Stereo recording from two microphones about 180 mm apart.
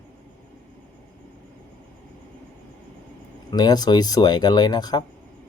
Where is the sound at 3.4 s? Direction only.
25° left (ahead or behind).